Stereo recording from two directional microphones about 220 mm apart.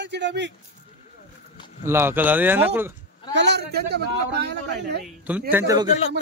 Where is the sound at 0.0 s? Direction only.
50° right (ahead or behind).